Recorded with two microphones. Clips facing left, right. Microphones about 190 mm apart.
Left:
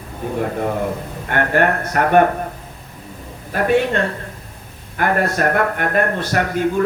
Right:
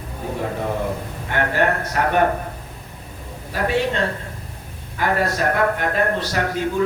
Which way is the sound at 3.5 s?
55° left (ahead or behind).